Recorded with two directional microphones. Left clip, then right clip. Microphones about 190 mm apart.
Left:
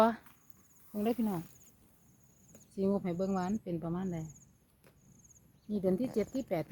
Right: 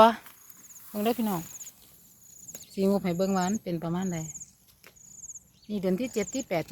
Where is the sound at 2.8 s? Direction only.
30° right (ahead or behind).